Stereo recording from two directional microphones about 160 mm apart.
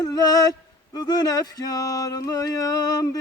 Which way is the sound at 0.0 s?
25° left (ahead or behind).